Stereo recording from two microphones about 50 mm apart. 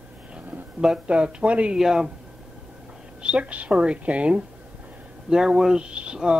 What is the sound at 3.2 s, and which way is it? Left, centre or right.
Speech, right.